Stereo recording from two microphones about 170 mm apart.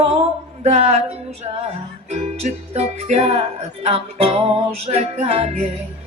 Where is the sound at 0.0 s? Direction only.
35° right (ahead or behind).